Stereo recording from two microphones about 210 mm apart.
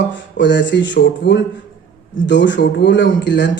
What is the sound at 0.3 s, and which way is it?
A man's voice, 60° left (ahead or behind).